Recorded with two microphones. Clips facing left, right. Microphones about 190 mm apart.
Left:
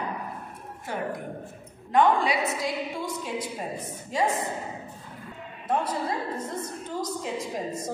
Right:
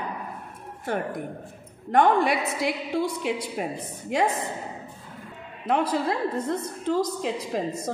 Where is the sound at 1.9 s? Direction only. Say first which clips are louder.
Right 2 dB; 55° right (ahead or behind).